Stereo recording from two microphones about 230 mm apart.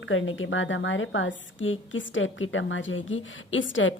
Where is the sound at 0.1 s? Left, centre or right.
Left.